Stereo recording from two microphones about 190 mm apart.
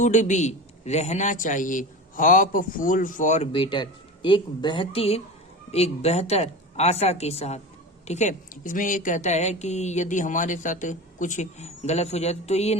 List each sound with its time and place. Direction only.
0.0 s a man's voice: 40° left (ahead or behind)